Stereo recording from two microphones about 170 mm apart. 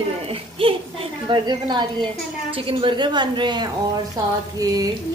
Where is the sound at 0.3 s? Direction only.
30° right (ahead or behind).